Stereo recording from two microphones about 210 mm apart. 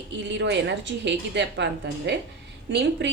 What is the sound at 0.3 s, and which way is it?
A woman's voice, 55° right (ahead or behind).